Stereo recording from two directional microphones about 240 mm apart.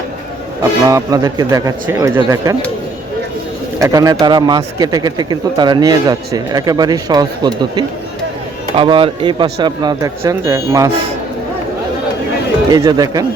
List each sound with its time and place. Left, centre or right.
0.9 s a man's voice: centre
3.8 s a man's voice: centre
12.7 s a man's voice: centre